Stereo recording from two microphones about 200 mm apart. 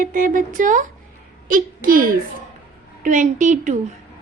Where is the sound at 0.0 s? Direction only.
40° right (ahead or behind).